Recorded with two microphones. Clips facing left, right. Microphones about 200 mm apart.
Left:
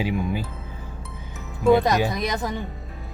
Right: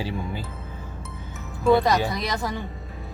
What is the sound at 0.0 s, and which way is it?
Speech, 15° left (ahead or behind).